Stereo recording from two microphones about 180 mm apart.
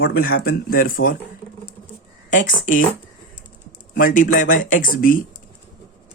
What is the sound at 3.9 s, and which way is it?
Speech, 50° left (ahead or behind).